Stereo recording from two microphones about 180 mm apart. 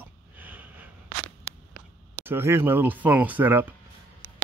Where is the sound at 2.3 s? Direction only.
15° right (ahead or behind).